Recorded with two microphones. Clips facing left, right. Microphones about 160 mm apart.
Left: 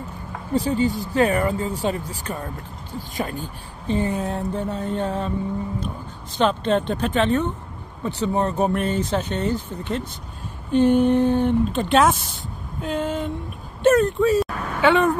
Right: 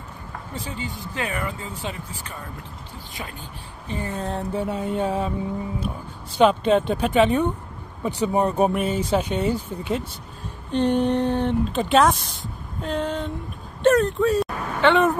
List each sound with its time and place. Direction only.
0.7 s speech: 40° left (ahead or behind)
3.8 s speech: 30° left (ahead or behind)
4.1 s speech: 5° left (ahead or behind)
6.3 s speech: 10° right (ahead or behind)
10.7 s speech: 5° left (ahead or behind)